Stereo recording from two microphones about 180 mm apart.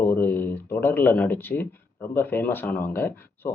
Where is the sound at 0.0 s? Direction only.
10° left (ahead or behind).